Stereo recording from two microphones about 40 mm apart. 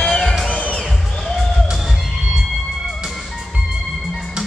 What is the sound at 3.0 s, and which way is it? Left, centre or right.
Music, centre.